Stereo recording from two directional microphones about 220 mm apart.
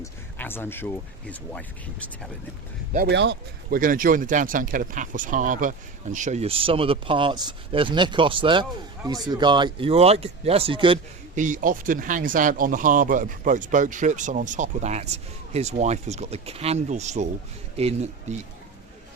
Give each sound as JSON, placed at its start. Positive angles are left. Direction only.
{"t": 0.0, "sound": "speech", "side_deg": 10}
{"t": 2.9, "sound": "speech", "side_deg": -45}
{"t": 3.8, "sound": "speech", "side_deg": -40}
{"t": 11.3, "sound": "speech", "side_deg": -35}